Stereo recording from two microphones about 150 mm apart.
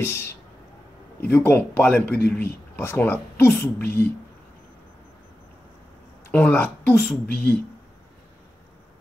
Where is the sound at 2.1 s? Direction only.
90° left.